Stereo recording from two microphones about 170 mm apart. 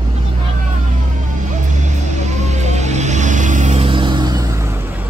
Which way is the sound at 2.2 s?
40° right (ahead or behind).